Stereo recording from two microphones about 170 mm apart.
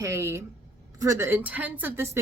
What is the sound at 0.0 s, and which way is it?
A woman's voice, 15° right (ahead or behind).